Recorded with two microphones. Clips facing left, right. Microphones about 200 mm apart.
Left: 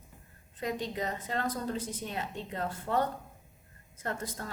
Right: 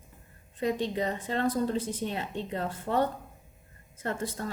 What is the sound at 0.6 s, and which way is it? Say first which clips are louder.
A woman's voice: right 5 dB; 30° right (ahead or behind).